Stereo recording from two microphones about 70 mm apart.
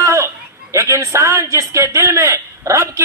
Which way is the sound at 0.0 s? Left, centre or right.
Right.